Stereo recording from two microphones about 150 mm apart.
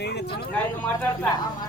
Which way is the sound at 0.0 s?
90° left.